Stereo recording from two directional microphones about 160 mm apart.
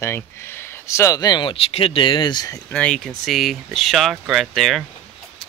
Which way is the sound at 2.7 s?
5° left (ahead or behind).